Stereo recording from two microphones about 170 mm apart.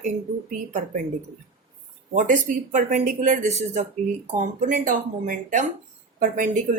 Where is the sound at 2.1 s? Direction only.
45° right (ahead or behind).